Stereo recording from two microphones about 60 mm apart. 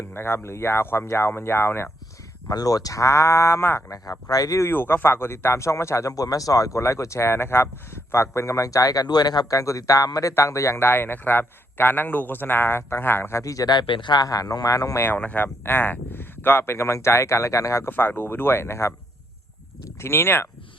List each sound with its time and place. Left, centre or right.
0.1 s a man's voice: left
2.5 s speech: left
4.3 s speech: left
4.6 s speech: left
9.5 s speech: left
10.3 s a man's voice: left
13.4 s speech: left
14.2 s speech: left
14.9 s a man's voice: left
17.8 s a man's voice: left